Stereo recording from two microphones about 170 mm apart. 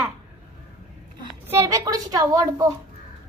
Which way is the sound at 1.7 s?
20° right (ahead or behind).